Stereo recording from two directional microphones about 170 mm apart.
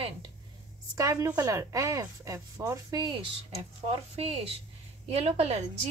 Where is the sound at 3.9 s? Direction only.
35° right (ahead or behind).